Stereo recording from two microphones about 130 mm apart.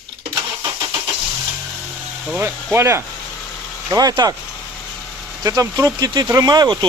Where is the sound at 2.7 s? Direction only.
20° right (ahead or behind).